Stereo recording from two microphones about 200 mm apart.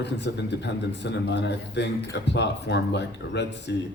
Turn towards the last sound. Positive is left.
turn(degrees=60)  # may be behind; listen again after turning